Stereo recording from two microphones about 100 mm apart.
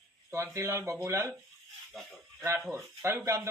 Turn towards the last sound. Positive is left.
turn(degrees=-25)  # may be behind; listen again after turning